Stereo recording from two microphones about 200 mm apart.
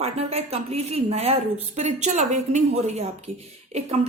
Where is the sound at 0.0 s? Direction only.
30° right (ahead or behind).